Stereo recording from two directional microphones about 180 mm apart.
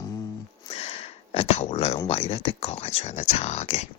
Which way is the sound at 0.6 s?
35° left (ahead or behind).